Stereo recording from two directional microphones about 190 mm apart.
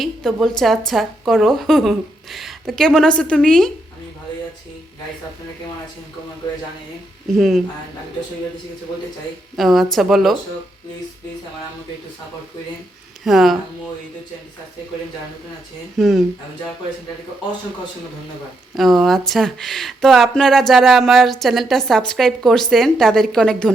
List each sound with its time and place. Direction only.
0.0 s speech: centre (ahead or behind)
7.3 s speech: centre (ahead or behind)
9.6 s speech: centre (ahead or behind)
13.2 s speech: centre (ahead or behind)
16.0 s speech: centre (ahead or behind)
18.7 s speech: centre (ahead or behind)